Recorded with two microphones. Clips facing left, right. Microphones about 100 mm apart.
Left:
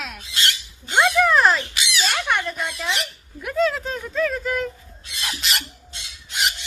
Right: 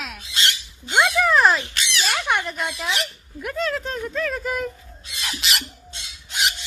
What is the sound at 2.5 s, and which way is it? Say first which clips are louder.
Speech: even; centre (ahead or behind).